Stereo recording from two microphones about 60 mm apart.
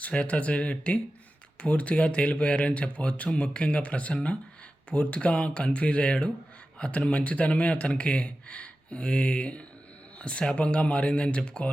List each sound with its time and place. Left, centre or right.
0.0 s speech: left